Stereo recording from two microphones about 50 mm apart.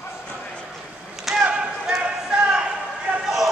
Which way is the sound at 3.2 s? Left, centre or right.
Centre.